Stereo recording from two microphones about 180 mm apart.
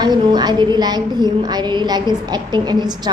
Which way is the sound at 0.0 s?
25° right (ahead or behind).